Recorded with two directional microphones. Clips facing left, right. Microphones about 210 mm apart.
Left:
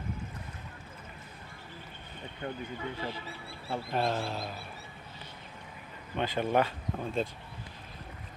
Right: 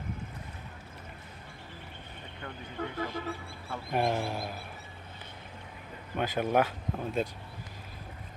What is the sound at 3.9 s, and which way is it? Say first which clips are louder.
Speech: right 3 dB; 15° right (ahead or behind).